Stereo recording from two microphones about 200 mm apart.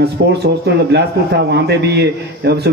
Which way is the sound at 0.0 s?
55° right (ahead or behind).